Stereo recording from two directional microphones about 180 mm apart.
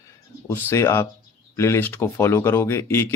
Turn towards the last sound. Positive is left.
turn(degrees=15)  # may be behind; listen again after turning